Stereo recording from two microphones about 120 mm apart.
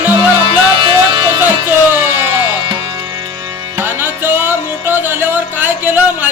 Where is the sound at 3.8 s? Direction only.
20° right (ahead or behind).